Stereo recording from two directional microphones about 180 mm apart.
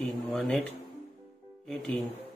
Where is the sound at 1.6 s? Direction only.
5° left (ahead or behind).